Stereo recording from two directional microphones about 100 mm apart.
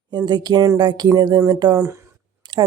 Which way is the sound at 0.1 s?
45° right (ahead or behind).